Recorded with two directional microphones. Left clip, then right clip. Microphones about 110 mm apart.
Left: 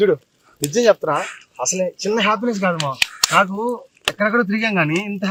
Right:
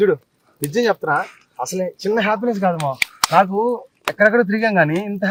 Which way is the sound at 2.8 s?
Centre (ahead or behind).